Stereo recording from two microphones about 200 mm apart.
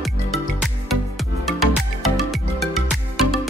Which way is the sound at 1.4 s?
Centre (ahead or behind).